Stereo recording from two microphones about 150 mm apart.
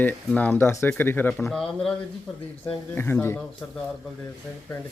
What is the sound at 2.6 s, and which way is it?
Speech, 15° left (ahead or behind).